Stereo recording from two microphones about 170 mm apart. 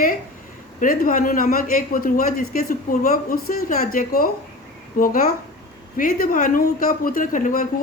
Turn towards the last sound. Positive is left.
turn(degrees=50)  # may be behind; listen again after turning